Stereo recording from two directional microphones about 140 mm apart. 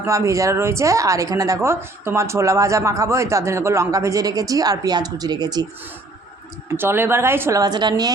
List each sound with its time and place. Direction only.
0.0 s a woman's voice: 20° right (ahead or behind)
6.7 s a woman's voice: 15° right (ahead or behind)